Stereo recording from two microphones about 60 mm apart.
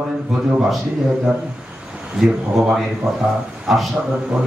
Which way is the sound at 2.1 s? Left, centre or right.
Centre.